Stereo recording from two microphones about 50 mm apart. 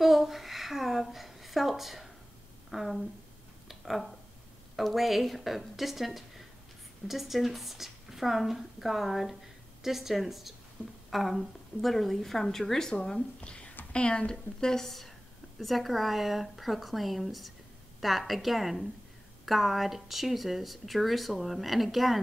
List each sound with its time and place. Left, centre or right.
0.0 s a sound: centre
2.7 s speech: centre
3.6 s a sound: centre
4.7 s speech: centre
13.4 s a woman's voice: left
14.3 s a woman's voice: centre